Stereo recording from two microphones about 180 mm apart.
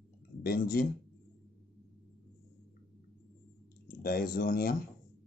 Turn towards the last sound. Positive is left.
turn(degrees=55)  # may be behind; listen again after turning